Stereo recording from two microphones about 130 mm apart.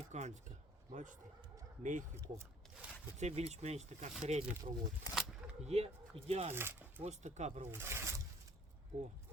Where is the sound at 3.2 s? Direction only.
60° right (ahead or behind).